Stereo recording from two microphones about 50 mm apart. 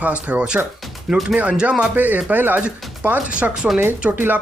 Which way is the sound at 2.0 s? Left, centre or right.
Right.